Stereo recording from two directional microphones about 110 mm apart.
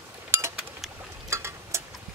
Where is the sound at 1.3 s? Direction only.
25° right (ahead or behind).